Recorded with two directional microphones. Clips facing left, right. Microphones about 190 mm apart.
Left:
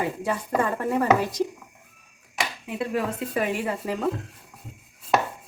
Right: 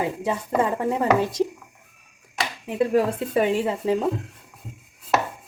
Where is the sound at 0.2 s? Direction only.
20° right (ahead or behind).